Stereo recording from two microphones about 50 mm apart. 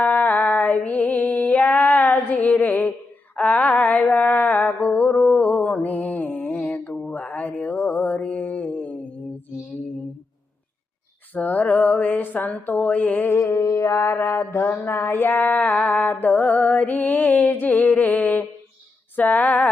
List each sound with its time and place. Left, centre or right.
0.0 s music: left
7.1 s mantra: left
11.3 s a sound: left
13.4 s mantra: left
14.7 s music: left